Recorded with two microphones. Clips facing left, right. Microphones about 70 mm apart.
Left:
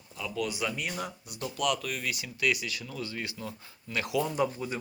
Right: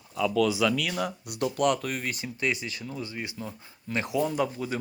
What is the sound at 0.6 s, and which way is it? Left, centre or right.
Speech, right.